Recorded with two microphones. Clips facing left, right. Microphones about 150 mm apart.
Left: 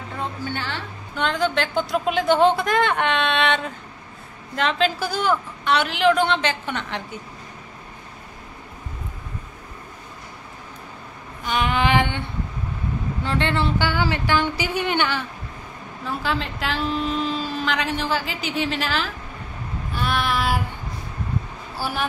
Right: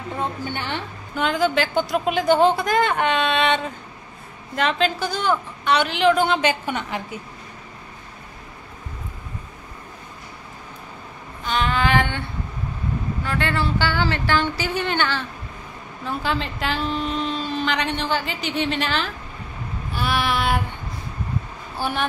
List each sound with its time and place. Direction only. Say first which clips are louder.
0.6 s a woman's voice: right 2 dB; 20° right (ahead or behind)
1.1 s a woman's voice: right 2 dB; 5° right (ahead or behind)
11.4 s female singing: even; 15° left (ahead or behind)
13.2 s speech: left 2 dB; 25° left (ahead or behind)
16.1 s a woman's voice: right 1 dB; centre (ahead or behind)